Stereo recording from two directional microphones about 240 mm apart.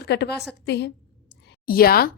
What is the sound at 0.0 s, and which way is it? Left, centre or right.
A woman's voice, left.